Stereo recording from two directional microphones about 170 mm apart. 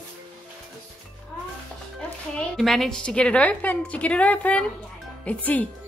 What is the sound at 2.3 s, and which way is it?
A woman's voice, centre (ahead or behind).